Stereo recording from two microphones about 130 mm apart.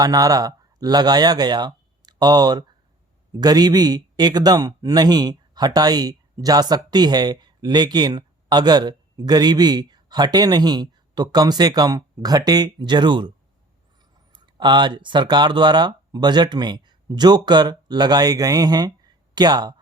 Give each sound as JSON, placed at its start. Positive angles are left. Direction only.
{"t": 0.0, "sound": "speech", "side_deg": -30}
{"t": 14.3, "sound": "speech", "side_deg": -35}